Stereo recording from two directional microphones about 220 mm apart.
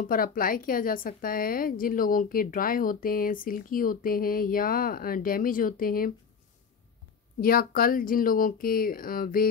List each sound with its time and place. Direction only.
0.0 s a woman's voice: 40° left (ahead or behind)
7.3 s a woman's voice: 40° left (ahead or behind)